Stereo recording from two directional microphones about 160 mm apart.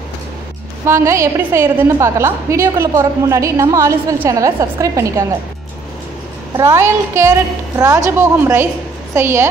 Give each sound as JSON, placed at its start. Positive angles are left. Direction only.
{"t": 0.8, "sound": "a woman's voice", "side_deg": -15}
{"t": 6.5, "sound": "a woman's voice", "side_deg": -15}